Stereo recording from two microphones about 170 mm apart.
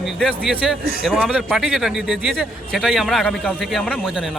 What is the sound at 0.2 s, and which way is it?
A man's voice, 5° right (ahead or behind).